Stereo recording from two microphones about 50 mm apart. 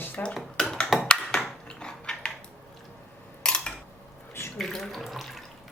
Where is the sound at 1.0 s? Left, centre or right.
Centre.